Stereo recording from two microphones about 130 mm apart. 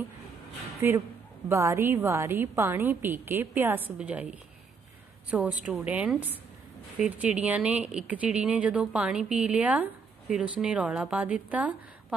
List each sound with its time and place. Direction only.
0.8 s speech: 15° right (ahead or behind)